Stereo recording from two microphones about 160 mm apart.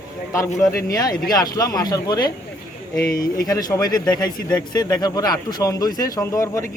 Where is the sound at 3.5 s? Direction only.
20° left (ahead or behind).